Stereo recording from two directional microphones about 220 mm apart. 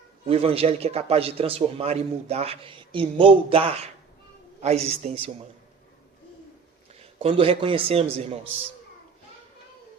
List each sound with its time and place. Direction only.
0.3 s a man's voice: 25° right (ahead or behind)
7.0 s a man's voice: 25° right (ahead or behind)